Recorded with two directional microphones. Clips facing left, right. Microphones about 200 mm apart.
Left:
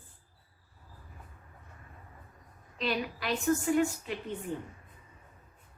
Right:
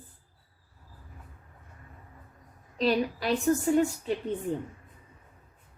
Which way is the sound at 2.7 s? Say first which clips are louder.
Right 7 dB; 35° right (ahead or behind).